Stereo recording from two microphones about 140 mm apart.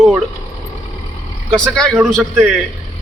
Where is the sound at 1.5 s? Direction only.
5° left (ahead or behind).